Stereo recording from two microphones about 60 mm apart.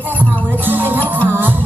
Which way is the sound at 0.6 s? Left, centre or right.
Right.